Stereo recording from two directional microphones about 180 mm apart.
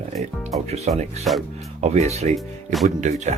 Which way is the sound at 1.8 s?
35° right (ahead or behind).